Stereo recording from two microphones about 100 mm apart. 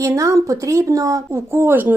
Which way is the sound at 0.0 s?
30° right (ahead or behind).